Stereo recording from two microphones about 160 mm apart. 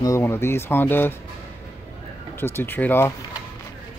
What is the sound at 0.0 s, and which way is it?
Speech, 15° left (ahead or behind).